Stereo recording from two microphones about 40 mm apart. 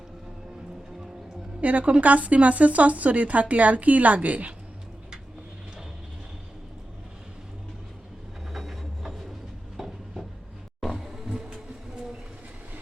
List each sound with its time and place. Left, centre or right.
1.6 s a woman's voice: right
8.5 s train: centre
9.7 s a sound: centre
11.1 s music: centre